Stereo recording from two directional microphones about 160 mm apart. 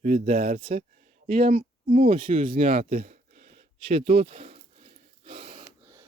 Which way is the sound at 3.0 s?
55° right (ahead or behind).